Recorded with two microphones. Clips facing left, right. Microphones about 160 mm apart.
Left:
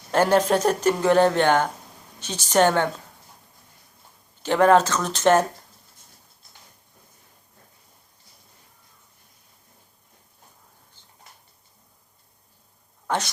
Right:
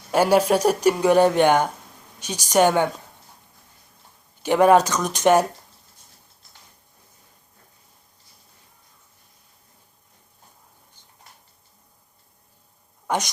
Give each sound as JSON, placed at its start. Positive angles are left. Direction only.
{"t": 0.1, "sound": "speech", "side_deg": -10}
{"t": 4.4, "sound": "speech", "side_deg": -15}
{"t": 13.1, "sound": "speech", "side_deg": -15}